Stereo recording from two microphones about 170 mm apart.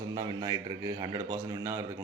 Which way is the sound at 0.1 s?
25° right (ahead or behind).